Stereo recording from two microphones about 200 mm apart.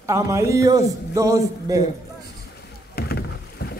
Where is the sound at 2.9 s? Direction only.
50° left (ahead or behind).